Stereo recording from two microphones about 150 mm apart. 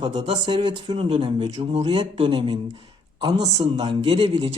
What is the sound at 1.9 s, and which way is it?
Speech, 35° right (ahead or behind).